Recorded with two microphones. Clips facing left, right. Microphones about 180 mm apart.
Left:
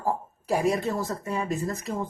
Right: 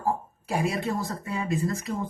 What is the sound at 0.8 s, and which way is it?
Speech, 40° left (ahead or behind).